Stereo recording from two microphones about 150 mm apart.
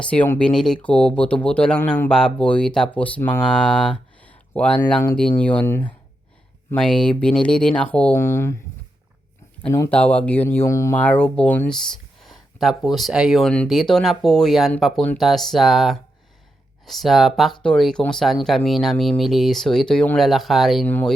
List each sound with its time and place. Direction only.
0.0 s speech: 10° left (ahead or behind)
8.1 s speech: 20° left (ahead or behind)
9.7 s speech: 15° left (ahead or behind)
12.2 s speech: centre (ahead or behind)
20.8 s speech: 10° left (ahead or behind)